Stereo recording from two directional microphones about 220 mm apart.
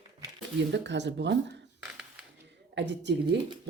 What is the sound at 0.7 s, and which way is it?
Speech, 55° right (ahead or behind).